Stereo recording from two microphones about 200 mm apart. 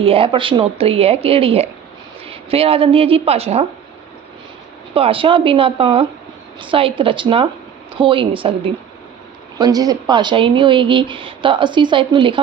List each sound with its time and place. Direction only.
0.0 s speech: 25° right (ahead or behind)
4.9 s speech: 25° right (ahead or behind)